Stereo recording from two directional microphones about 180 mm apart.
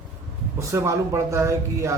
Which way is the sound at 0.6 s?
15° right (ahead or behind).